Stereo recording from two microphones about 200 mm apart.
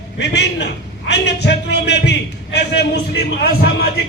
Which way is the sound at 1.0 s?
60° left (ahead or behind).